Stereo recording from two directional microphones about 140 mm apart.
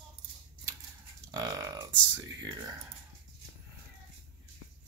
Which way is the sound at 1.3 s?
30° right (ahead or behind).